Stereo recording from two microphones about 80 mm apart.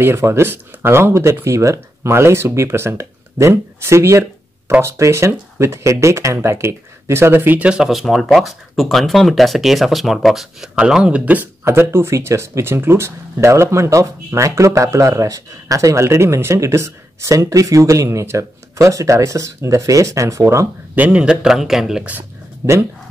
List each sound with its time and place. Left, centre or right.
0.0 s speech: right
11.6 s speech: right
20.9 s speech: centre
22.6 s speech: right